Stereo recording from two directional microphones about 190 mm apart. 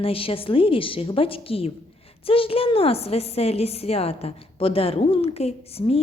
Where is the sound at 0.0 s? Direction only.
30° left (ahead or behind).